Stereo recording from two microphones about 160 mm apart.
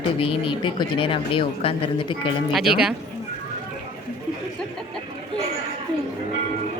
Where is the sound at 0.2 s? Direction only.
35° left (ahead or behind).